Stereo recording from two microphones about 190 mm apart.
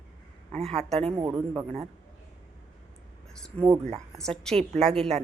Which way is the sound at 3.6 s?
30° right (ahead or behind).